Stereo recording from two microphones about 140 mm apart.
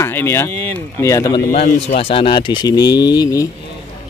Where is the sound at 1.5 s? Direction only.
50° left (ahead or behind).